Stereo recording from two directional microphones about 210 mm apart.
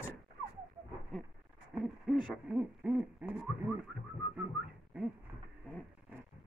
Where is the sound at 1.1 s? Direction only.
5° left (ahead or behind).